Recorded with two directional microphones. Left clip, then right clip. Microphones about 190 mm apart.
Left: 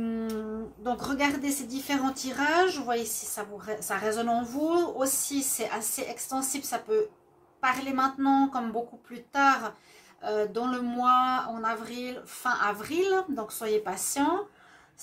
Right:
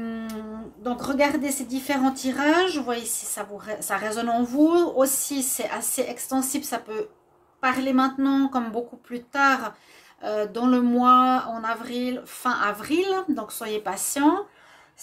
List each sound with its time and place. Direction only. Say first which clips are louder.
0.8 s a woman's voice: right 5 dB; 45° right (ahead or behind)